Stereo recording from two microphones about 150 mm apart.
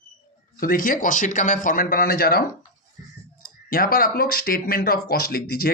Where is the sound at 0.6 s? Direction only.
70° left (ahead or behind); by 2.4 s 90° left.